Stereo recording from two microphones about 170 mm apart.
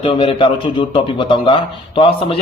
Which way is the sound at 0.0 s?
30° left (ahead or behind).